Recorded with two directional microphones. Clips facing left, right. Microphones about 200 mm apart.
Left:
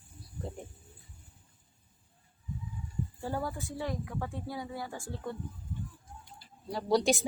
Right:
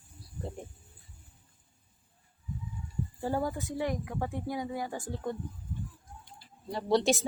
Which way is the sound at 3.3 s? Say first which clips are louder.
Right 4 dB; 20° right (ahead or behind).